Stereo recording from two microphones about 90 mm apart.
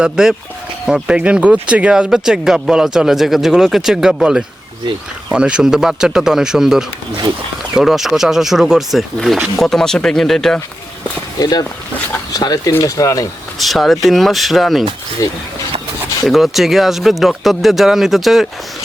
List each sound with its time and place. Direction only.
0.0 s speech: 5° right (ahead or behind)
11.3 s speech: 45° left (ahead or behind)
13.6 s speech: centre (ahead or behind)
16.2 s speech: centre (ahead or behind)